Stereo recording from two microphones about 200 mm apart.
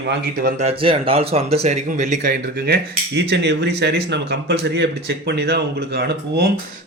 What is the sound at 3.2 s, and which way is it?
Speech, 60° right (ahead or behind).